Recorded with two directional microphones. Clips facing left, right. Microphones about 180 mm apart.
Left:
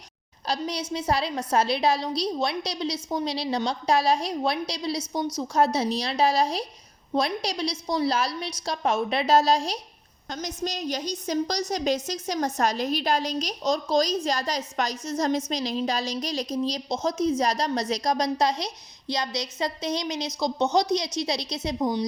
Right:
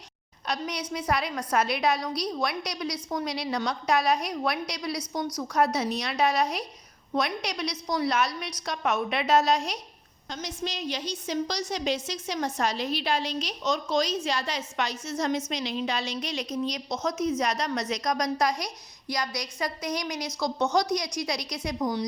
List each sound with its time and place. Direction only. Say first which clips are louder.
0.4 s a woman's voice: left 3 dB; 30° left (ahead or behind)
10.2 s a woman's voice: left 3 dB; 45° left (ahead or behind); by 22.0 s 25° left (ahead or behind)